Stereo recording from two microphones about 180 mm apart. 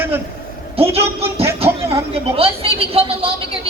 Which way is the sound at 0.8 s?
35° right (ahead or behind).